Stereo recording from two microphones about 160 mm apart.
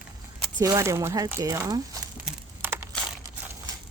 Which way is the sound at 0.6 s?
20° right (ahead or behind).